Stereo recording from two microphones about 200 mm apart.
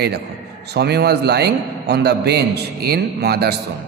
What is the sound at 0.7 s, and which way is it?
A man's voice, 55° right (ahead or behind).